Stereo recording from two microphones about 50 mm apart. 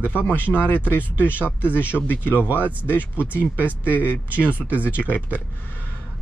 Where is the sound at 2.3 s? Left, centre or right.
Right.